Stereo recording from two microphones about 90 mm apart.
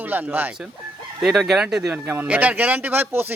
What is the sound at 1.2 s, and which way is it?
Speech, 5° right (ahead or behind).